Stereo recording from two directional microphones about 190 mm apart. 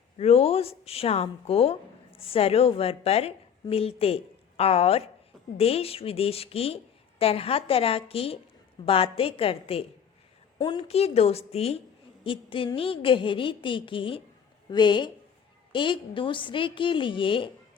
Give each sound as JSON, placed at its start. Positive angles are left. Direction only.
{"t": 0.2, "sound": "a woman's voice", "side_deg": 30}